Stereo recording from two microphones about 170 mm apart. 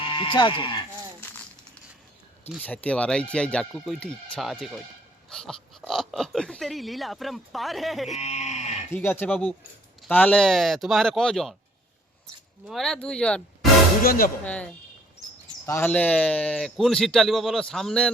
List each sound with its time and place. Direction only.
0.1 s speech: 30° left (ahead or behind)
2.6 s speech: 10° left (ahead or behind)
8.2 s livestock: 40° left (ahead or behind)
8.9 s speech: 15° left (ahead or behind)
12.6 s speech: centre (ahead or behind)
14.0 s speech: 60° left (ahead or behind)
14.4 s speech: 5° left (ahead or behind)